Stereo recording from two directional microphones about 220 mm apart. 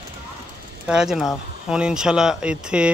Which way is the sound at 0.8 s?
5° right (ahead or behind).